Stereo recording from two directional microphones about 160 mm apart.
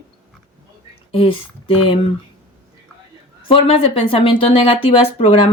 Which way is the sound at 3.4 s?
35° left (ahead or behind).